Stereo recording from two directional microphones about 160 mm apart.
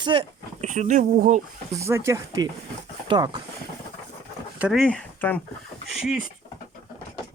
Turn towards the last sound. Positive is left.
turn(degrees=0)  # may be behind; listen again after turning